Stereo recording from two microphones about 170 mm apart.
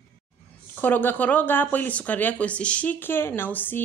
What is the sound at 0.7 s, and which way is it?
Speech, 10° left (ahead or behind).